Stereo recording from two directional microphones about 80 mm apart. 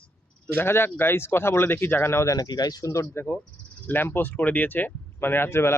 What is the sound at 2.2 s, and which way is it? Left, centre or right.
Speech, left.